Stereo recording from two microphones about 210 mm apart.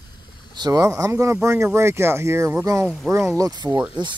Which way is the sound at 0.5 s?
20° right (ahead or behind).